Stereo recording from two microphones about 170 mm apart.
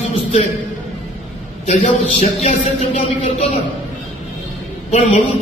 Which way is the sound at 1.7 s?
45° left (ahead or behind).